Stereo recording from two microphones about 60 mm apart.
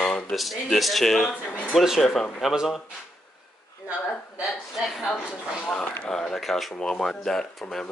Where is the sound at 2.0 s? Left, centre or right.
Centre.